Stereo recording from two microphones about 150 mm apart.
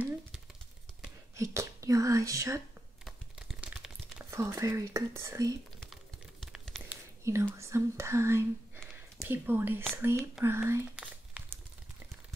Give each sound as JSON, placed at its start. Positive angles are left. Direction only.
{"t": 1.3, "sound": "speech", "side_deg": -20}
{"t": 3.1, "sound": "a sound", "side_deg": 0}
{"t": 4.3, "sound": "speech", "side_deg": -20}
{"t": 6.4, "sound": "a sound", "side_deg": 5}
{"t": 6.9, "sound": "whispering", "side_deg": -20}
{"t": 7.5, "sound": "speech", "side_deg": -20}
{"t": 11.0, "sound": "crumpling", "side_deg": -10}